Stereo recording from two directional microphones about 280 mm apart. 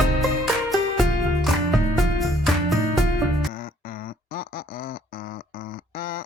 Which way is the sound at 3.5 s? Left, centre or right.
Left.